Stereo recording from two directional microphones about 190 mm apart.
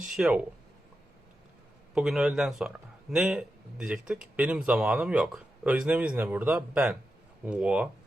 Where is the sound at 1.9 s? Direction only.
5° right (ahead or behind).